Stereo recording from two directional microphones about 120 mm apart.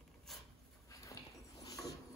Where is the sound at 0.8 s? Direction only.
30° left (ahead or behind).